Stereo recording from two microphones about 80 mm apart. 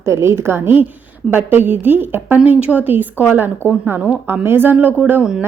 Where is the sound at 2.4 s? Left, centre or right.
Centre.